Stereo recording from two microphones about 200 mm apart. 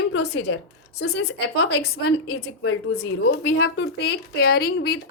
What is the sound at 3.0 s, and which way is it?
A woman's voice, 65° left (ahead or behind).